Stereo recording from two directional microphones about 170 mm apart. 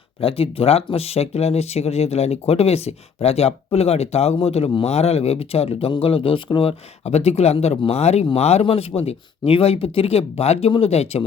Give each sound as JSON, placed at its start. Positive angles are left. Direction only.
{"t": 0.2, "sound": "speech", "side_deg": 35}